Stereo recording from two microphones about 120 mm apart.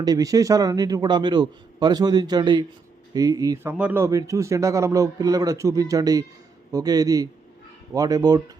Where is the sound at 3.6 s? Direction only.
15° right (ahead or behind).